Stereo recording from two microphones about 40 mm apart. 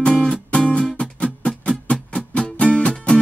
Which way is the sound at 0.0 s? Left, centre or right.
Centre.